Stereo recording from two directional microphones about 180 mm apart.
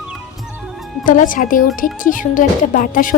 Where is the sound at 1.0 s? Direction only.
45° left (ahead or behind).